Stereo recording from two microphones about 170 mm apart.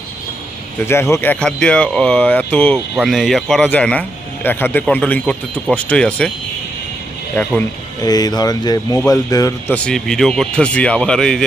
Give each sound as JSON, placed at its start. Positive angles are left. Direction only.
{"t": 0.8, "sound": "speech", "side_deg": 15}
{"t": 8.0, "sound": "speech", "side_deg": 20}
{"t": 9.7, "sound": "speech", "side_deg": 5}